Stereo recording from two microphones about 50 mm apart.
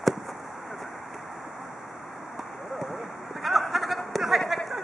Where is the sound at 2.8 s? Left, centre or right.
Centre.